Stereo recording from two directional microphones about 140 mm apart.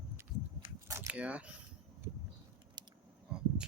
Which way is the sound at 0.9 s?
20° right (ahead or behind).